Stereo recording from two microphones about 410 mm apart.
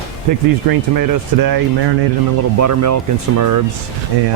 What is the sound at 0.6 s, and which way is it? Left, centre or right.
Speech, right.